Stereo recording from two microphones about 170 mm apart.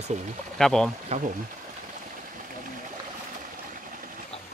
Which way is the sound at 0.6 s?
5° left (ahead or behind).